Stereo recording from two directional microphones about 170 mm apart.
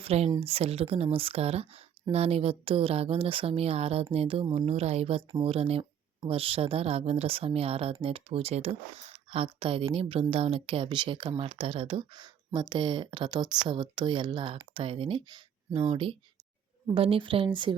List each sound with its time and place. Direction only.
0.0 s speech: 35° right (ahead or behind)